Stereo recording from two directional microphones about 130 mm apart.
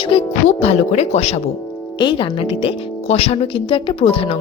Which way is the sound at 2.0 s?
40° left (ahead or behind).